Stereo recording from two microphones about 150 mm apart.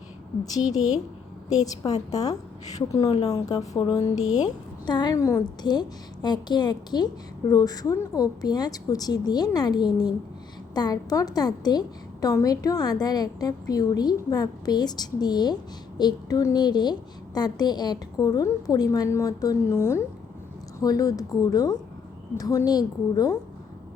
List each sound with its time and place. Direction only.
1.6 s a woman's voice: 25° left (ahead or behind)
4.2 s speech: 50° left (ahead or behind)
4.4 s a woman's voice: 30° left (ahead or behind)